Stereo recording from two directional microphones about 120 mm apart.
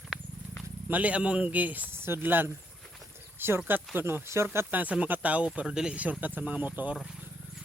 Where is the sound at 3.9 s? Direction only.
15° right (ahead or behind).